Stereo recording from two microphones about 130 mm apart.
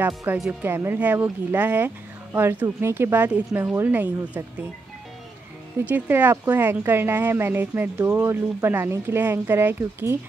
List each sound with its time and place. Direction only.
0.4 s speech: 15° right (ahead or behind)
5.9 s speech: 15° right (ahead or behind)